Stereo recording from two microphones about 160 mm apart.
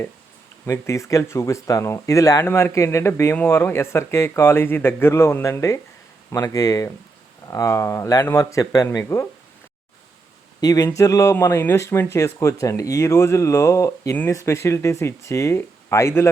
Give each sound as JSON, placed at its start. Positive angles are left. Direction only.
{"t": 0.6, "sound": "speech", "side_deg": 20}
{"t": 10.6, "sound": "speech", "side_deg": 25}